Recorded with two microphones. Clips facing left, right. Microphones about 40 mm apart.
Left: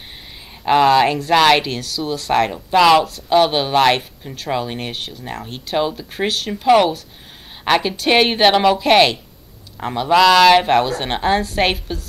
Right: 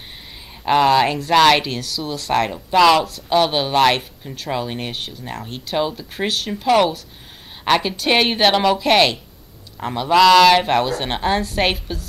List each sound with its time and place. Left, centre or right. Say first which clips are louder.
0.7 s speech: left 2 dB; centre